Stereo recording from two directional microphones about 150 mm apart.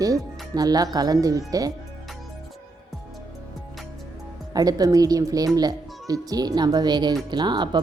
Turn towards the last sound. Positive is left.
turn(degrees=-30)  # may be behind; listen again after turning